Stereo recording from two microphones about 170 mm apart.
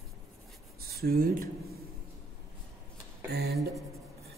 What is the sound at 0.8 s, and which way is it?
Speech, 65° right (ahead or behind).